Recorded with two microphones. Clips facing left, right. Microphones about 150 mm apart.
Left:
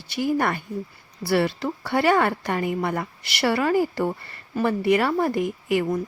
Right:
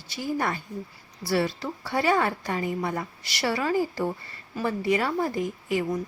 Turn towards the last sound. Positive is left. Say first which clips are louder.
# left 4 dB
turn(degrees=65)  # may be behind; listen again after turning